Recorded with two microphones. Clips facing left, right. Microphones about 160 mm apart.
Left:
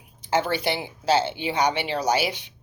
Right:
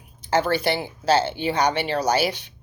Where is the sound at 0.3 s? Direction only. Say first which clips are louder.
Right 3 dB; 15° left (ahead or behind).